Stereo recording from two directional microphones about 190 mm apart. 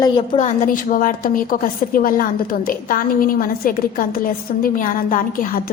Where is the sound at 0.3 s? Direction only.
40° left (ahead or behind).